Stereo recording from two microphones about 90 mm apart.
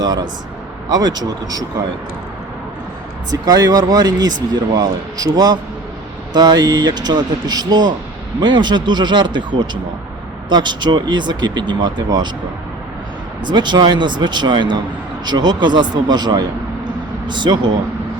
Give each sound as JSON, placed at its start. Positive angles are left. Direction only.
{"t": 0.9, "sound": "speech", "side_deg": -50}
{"t": 3.4, "sound": "speech", "side_deg": -45}
{"t": 13.5, "sound": "speech", "side_deg": -55}